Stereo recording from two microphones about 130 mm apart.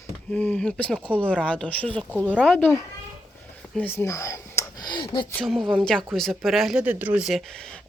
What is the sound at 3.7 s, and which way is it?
Speech, 15° left (ahead or behind).